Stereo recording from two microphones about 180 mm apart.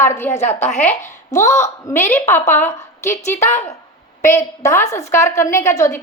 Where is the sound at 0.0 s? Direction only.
15° left (ahead or behind).